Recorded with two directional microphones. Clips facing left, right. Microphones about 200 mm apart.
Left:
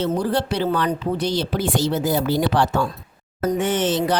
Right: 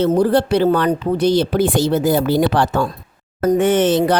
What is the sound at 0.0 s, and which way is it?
Speech, 55° right (ahead or behind).